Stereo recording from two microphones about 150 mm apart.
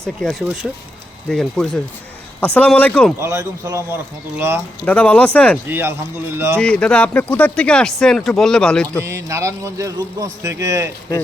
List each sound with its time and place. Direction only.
0.0 s speech: 5° left (ahead or behind)
3.2 s speech: 20° right (ahead or behind)
4.9 s speech: 10° left (ahead or behind)
5.6 s speech: 15° right (ahead or behind)
6.6 s speech: 5° left (ahead or behind)
9.0 s speech: 20° right (ahead or behind)